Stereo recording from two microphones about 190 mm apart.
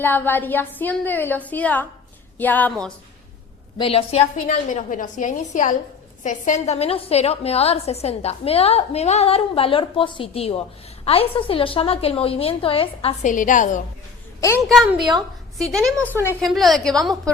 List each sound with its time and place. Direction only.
0.0 s a woman's voice: 10° left (ahead or behind)
3.8 s a woman's voice: 30° left (ahead or behind)
13.3 s a woman's voice: 45° left (ahead or behind)
14.7 s a woman's voice: centre (ahead or behind)